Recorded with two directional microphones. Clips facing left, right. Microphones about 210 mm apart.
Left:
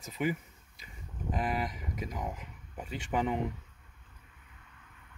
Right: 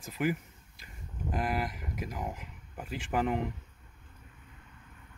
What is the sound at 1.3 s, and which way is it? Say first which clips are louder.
Speech: even; centre (ahead or behind).